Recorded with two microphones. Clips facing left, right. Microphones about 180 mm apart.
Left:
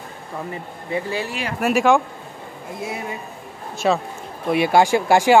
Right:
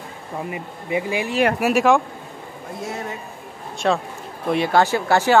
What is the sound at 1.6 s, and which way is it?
Speech, centre (ahead or behind).